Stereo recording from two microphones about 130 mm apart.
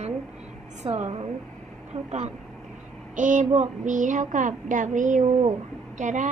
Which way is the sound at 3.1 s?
70° right (ahead or behind).